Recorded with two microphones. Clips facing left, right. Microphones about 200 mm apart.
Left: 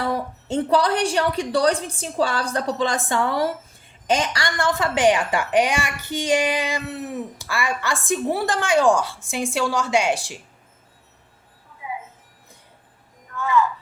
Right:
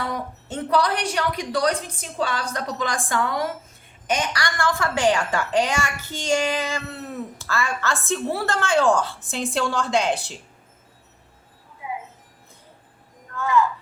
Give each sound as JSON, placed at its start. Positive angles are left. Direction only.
{"t": 0.1, "sound": "a woman's voice", "side_deg": 30}